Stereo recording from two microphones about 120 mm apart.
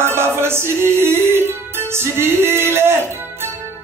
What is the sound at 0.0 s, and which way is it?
Music, 20° right (ahead or behind).